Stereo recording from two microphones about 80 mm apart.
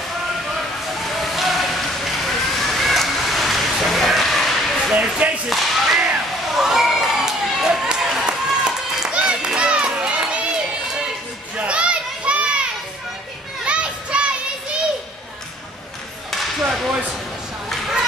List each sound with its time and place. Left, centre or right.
1.0 s a sound: centre
4.9 s speech: centre
5.5 s whip: centre
6.5 s run: centre
11.5 s children playing: centre
13.7 s children playing: centre
17.6 s a sound: centre